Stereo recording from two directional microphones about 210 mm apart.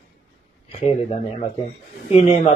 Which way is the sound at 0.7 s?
30° left (ahead or behind).